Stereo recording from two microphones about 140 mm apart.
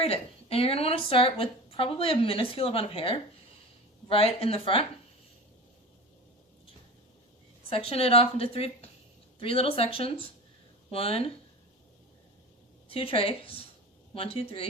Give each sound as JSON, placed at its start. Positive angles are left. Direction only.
{"t": 0.0, "sound": "a woman's voice", "side_deg": 45}
{"t": 7.7, "sound": "a woman's voice", "side_deg": 45}
{"t": 12.9, "sound": "a woman's voice", "side_deg": 40}